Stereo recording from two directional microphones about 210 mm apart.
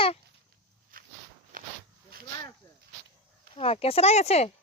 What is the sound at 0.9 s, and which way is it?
Walk, 40° right (ahead or behind).